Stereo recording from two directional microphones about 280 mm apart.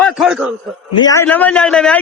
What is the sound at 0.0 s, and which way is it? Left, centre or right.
Chuckle, centre.